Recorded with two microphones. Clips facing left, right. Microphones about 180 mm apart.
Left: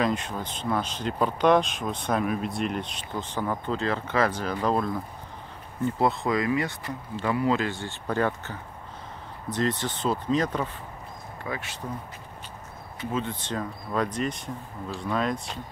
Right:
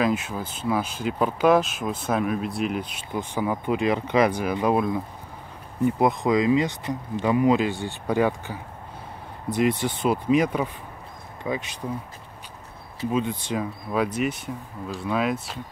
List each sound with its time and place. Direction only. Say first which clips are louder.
0.0 s speech: right 3 dB; 5° right (ahead or behind)
13.1 s speech: right 4 dB; 15° right (ahead or behind)